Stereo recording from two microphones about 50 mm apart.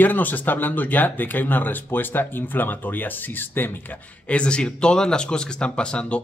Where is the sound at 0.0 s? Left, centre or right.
Left.